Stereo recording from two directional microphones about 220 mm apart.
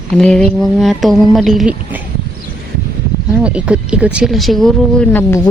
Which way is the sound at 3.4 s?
5° right (ahead or behind).